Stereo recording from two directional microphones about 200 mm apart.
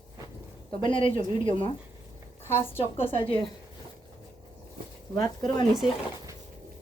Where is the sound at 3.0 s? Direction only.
30° left (ahead or behind).